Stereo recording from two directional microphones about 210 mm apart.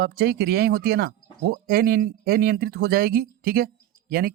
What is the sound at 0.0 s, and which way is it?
Speech, 50° right (ahead or behind).